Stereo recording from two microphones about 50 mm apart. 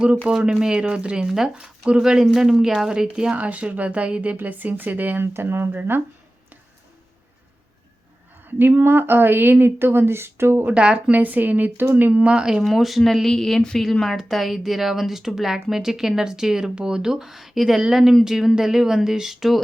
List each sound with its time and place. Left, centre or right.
0.3 s speech: centre
3.3 s speech: right
5.3 s speech: right
8.8 s speech: right
10.8 s speech: right
11.1 s speech: right
12.2 s speech: right
12.6 s speech: centre